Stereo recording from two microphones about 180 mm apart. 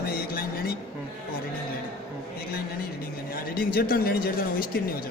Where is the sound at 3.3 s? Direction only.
55° left (ahead or behind).